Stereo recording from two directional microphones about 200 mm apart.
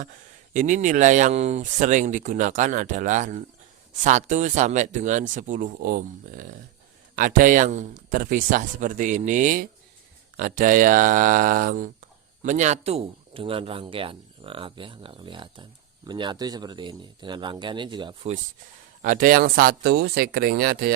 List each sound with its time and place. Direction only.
0.0 s speech: 40° right (ahead or behind)
19.0 s speech: 40° right (ahead or behind)